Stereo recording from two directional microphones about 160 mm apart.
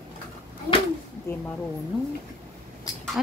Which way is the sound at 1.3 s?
15° left (ahead or behind).